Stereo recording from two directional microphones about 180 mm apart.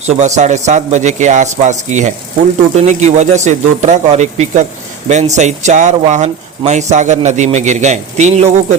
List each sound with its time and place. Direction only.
0.0 s speech: 40° right (ahead or behind)